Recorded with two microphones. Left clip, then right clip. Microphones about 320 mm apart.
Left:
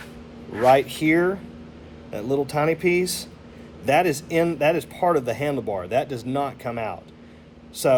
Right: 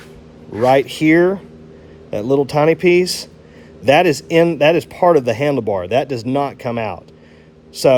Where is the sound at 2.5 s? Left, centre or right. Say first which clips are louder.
Right 8 dB; right.